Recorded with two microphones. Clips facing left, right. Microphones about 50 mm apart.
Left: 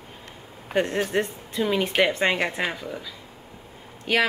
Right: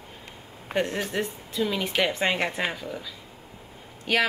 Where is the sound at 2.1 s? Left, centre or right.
Centre.